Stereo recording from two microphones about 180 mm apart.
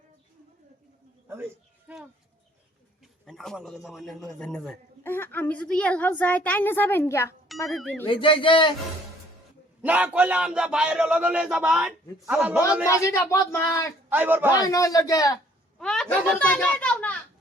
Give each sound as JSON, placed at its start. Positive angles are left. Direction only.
{"t": 1.9, "sound": "a man's voice", "side_deg": -10}
{"t": 7.7, "sound": "speech", "side_deg": 0}
{"t": 8.0, "sound": "a man's voice", "side_deg": 30}
{"t": 9.8, "sound": "speech", "side_deg": -10}
{"t": 12.9, "sound": "a man's voice", "side_deg": 15}
{"t": 14.1, "sound": "speech", "side_deg": -10}
{"t": 14.5, "sound": "a man's voice", "side_deg": 20}
{"t": 15.8, "sound": "a child's voice", "side_deg": 5}